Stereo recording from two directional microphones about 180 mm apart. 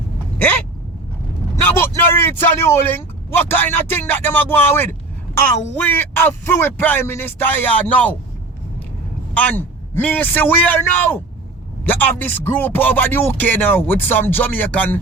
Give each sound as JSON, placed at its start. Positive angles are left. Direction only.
{"t": 1.6, "sound": "speech", "side_deg": 10}
{"t": 9.3, "sound": "speech", "side_deg": 10}